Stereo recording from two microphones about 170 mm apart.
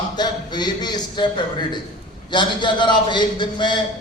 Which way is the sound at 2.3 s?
30° left (ahead or behind).